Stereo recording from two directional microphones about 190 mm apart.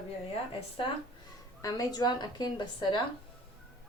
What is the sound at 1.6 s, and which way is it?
A woman's voice, 20° left (ahead or behind).